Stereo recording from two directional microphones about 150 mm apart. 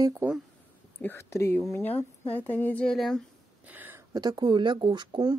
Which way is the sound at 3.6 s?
15° right (ahead or behind).